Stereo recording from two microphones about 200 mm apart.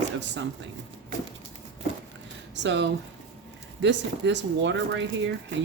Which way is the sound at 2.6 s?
60° right (ahead or behind).